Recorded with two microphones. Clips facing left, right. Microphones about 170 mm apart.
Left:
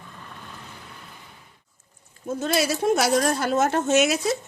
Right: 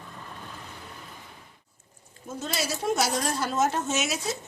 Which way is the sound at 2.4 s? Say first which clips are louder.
Left 7 dB; 60° left (ahead or behind).